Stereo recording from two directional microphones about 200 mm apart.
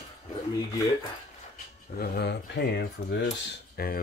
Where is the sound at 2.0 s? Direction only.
55° left (ahead or behind).